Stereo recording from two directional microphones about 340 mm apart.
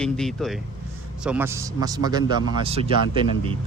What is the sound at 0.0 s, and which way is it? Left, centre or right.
A man's voice, centre.